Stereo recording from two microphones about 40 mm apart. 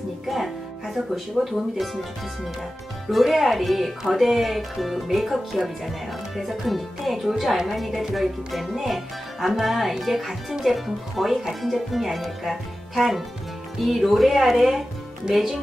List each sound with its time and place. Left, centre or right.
0.3 s speech: centre
3.1 s speech: centre